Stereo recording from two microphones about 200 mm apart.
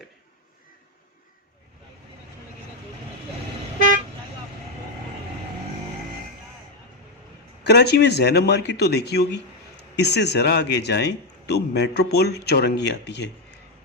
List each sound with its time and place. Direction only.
7.6 s speech: 55° left (ahead or behind)